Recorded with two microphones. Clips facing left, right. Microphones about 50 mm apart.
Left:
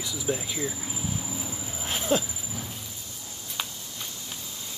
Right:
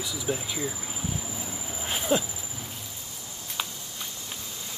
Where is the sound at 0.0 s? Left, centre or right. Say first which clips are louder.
Left 1 dB; centre.